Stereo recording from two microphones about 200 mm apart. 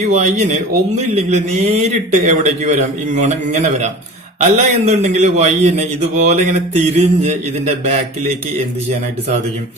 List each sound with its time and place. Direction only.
0.1 s a man's voice: 35° right (ahead or behind)